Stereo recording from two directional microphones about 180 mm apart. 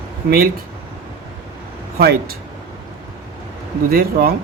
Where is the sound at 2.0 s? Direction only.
60° right (ahead or behind).